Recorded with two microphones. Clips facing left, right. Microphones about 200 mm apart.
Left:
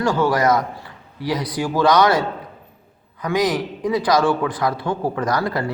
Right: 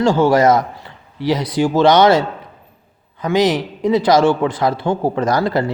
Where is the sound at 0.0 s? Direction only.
25° right (ahead or behind).